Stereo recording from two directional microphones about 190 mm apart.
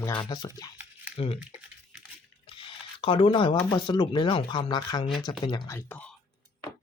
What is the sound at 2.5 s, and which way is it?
Speech, 25° left (ahead or behind).